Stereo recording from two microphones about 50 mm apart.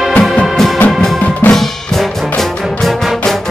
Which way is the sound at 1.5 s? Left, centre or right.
Centre.